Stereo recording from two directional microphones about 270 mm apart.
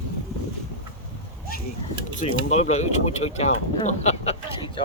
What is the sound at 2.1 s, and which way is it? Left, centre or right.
Speech, left.